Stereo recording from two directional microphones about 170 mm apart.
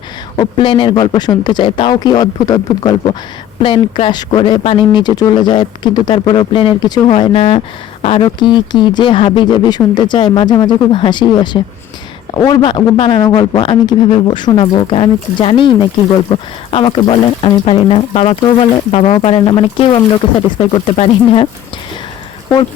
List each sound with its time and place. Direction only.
0.3 s speech: 30° left (ahead or behind)